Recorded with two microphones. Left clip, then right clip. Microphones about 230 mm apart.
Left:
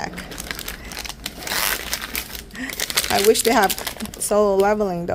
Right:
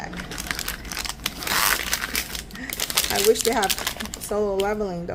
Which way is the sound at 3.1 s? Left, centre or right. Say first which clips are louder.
Left 5 dB; left.